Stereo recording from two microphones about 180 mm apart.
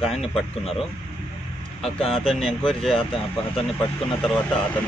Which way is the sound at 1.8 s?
35° left (ahead or behind).